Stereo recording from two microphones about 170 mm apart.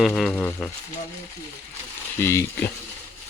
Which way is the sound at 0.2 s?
5° left (ahead or behind).